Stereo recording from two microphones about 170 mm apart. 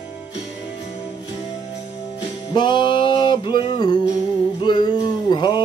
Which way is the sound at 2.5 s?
25° left (ahead or behind).